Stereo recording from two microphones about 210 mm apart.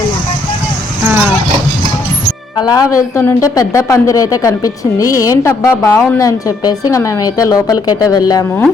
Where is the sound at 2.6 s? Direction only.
20° left (ahead or behind).